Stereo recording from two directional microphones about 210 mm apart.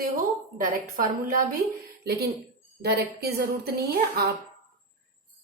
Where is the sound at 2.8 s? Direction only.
50° right (ahead or behind).